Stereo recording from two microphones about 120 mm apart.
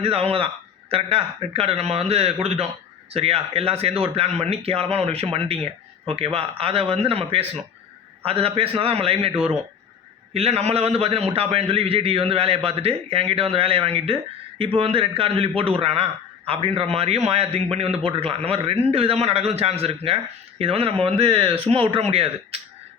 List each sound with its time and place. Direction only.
0.0 s a man's voice: 55° right (ahead or behind)